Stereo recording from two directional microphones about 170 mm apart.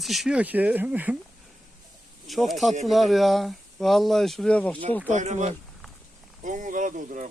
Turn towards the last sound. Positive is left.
turn(degrees=-50)  # may be behind; listen again after turning